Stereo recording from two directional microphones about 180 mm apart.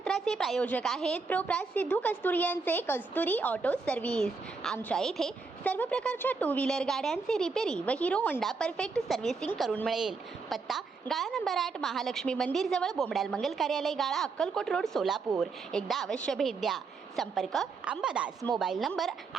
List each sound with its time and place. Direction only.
0.0 s a woman's voice: centre (ahead or behind)